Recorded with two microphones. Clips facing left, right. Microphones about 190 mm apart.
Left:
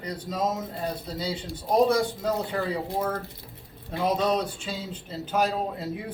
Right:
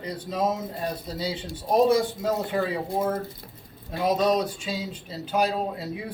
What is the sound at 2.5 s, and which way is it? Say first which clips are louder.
Speech: right 3 dB; 25° right (ahead or behind).